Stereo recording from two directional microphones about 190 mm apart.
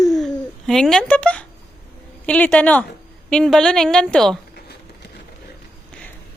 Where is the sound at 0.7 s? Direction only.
5° left (ahead or behind).